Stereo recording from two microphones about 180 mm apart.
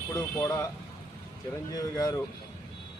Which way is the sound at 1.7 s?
20° left (ahead or behind).